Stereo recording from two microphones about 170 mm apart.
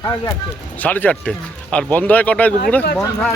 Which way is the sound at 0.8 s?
10° left (ahead or behind).